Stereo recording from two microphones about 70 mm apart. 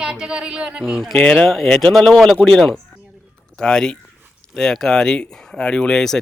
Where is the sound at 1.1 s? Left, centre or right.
Centre.